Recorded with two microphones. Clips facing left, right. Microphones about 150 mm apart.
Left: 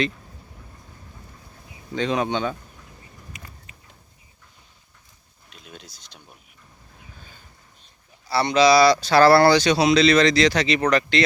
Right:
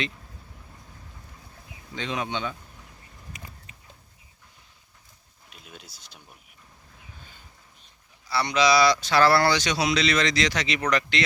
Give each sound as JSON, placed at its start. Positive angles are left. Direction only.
{"t": 2.0, "sound": "speech", "side_deg": 40}
{"t": 5.5, "sound": "speech", "side_deg": -5}
{"t": 8.3, "sound": "speech", "side_deg": 30}